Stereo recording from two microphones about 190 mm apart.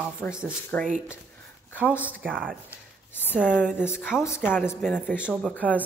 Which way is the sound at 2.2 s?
10° right (ahead or behind).